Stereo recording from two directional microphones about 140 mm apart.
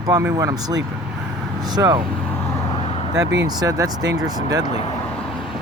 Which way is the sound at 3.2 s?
25° right (ahead or behind).